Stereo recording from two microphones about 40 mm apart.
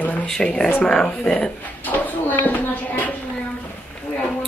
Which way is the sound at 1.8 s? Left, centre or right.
Left.